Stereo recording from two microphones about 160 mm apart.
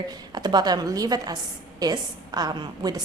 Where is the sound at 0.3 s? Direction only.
25° right (ahead or behind).